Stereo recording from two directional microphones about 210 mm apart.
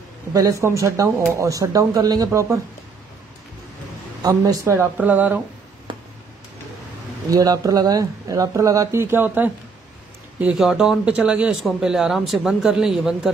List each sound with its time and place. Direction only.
0.3 s speech: 15° right (ahead or behind)
4.2 s speech: 15° right (ahead or behind)
7.2 s a man's voice: 15° right (ahead or behind)